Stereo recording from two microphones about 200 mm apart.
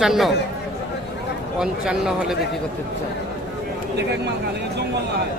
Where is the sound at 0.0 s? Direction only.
Centre (ahead or behind).